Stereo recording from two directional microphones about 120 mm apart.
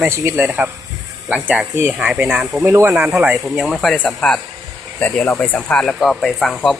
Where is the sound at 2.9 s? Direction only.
10° right (ahead or behind).